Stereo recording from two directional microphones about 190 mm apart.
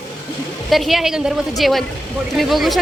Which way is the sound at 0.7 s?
Centre (ahead or behind).